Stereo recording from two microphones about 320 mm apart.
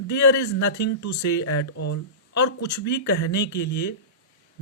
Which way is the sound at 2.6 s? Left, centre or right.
Left.